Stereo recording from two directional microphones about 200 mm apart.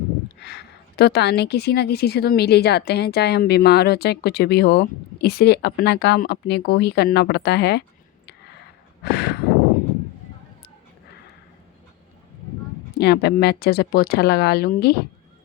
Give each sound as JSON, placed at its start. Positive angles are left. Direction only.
{"t": 0.3, "sound": "a woman's voice", "side_deg": 55}
{"t": 9.0, "sound": "a sound", "side_deg": 55}
{"t": 13.0, "sound": "speech", "side_deg": 55}